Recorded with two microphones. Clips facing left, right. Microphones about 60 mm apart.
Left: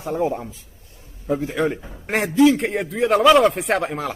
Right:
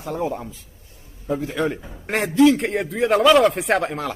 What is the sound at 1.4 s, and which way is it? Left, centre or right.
A man's voice, centre.